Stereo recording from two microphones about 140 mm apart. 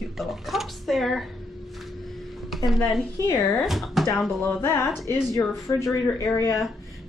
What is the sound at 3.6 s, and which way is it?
Speech, centre (ahead or behind).